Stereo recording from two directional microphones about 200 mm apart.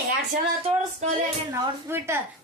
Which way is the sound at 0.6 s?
30° right (ahead or behind).